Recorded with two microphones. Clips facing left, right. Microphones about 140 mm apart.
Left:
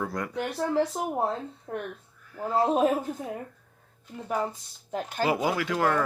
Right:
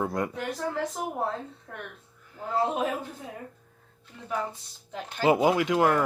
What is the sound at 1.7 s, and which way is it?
Speech, 30° left (ahead or behind).